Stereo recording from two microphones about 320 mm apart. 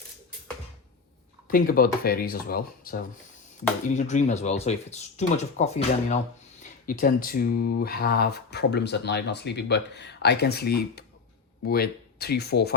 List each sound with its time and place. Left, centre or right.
1.5 s speech: left